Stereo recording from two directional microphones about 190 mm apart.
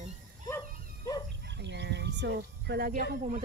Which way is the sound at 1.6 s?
65° right (ahead or behind).